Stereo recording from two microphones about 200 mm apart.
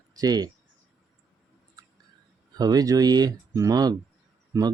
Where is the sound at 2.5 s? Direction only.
20° right (ahead or behind).